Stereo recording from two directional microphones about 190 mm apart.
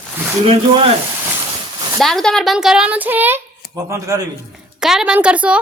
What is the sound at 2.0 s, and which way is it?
A woman's voice, centre (ahead or behind).